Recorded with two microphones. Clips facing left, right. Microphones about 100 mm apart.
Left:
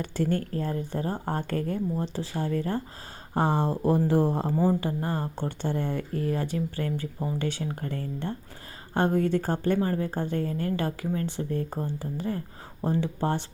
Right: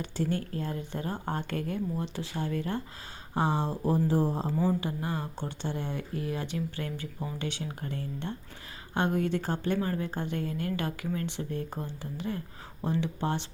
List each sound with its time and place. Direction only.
0.0 s a woman's voice: 45° left (ahead or behind)
4.5 s a woman's voice: 40° left (ahead or behind)